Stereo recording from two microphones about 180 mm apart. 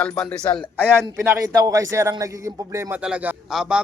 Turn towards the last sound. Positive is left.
turn(degrees=-5)  # may be behind; listen again after turning